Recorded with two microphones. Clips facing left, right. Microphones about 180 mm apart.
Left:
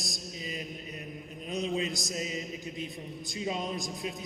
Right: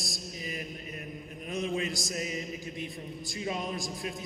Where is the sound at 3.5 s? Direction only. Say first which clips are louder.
Even; centre (ahead or behind).